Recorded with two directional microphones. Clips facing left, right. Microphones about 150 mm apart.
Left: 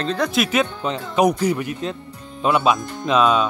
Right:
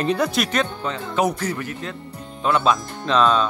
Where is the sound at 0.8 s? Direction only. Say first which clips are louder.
Left 4 dB; 15° left (ahead or behind).